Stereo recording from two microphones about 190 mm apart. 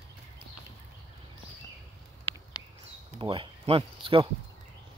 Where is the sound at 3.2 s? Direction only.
30° right (ahead or behind).